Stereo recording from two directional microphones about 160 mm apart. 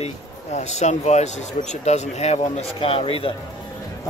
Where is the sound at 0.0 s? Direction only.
45° left (ahead or behind).